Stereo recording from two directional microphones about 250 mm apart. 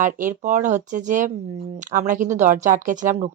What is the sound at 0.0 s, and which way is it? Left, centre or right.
A woman's voice, right.